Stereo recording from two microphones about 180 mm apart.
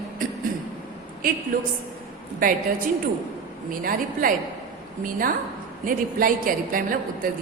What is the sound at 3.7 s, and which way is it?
A woman's voice, 50° right (ahead or behind).